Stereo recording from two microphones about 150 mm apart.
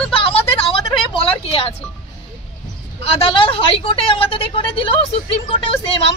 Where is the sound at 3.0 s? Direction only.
40° left (ahead or behind).